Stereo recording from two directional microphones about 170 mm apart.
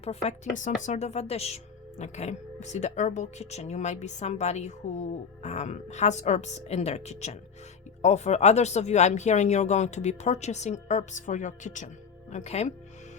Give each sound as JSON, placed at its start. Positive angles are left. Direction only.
{"t": 0.0, "sound": "speech", "side_deg": 40}